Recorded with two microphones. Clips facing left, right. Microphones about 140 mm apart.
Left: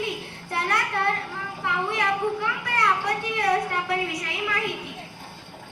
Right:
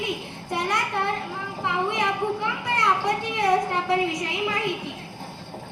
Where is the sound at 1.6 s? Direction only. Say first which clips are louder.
Right 2 dB; 20° right (ahead or behind).